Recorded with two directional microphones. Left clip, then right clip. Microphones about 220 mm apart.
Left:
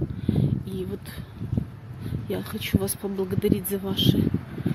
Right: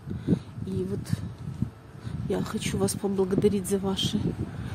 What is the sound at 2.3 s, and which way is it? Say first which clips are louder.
Speech: left 1 dB; 10° right (ahead or behind).